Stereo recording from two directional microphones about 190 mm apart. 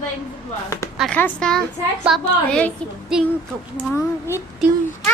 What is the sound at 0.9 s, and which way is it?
Speech, 5° left (ahead or behind).